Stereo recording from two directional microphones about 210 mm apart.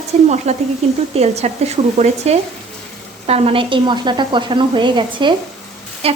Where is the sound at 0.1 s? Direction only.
30° right (ahead or behind).